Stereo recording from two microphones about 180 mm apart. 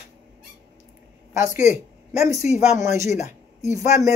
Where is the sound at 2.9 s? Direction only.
15° right (ahead or behind).